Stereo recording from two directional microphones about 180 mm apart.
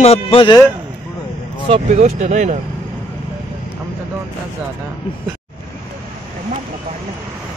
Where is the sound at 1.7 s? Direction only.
40° right (ahead or behind).